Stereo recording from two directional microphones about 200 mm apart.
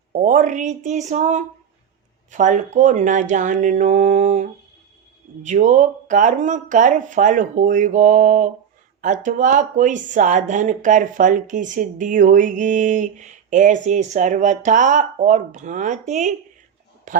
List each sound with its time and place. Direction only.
0.1 s a man's voice: 40° right (ahead or behind)